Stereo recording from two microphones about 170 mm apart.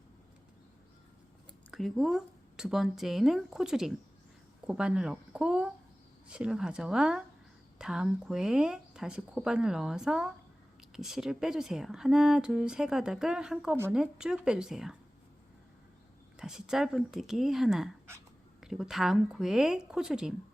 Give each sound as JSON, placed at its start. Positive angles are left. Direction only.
{"t": 1.7, "sound": "speech", "side_deg": 0}
{"t": 16.4, "sound": "speech", "side_deg": -5}